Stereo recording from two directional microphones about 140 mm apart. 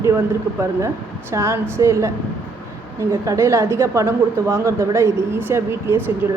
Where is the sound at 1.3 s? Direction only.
20° right (ahead or behind).